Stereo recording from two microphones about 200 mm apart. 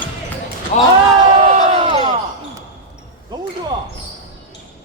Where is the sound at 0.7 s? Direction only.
35° left (ahead or behind).